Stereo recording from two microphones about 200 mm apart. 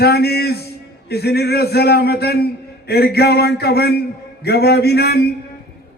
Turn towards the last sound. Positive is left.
turn(degrees=55)  # may be behind; listen again after turning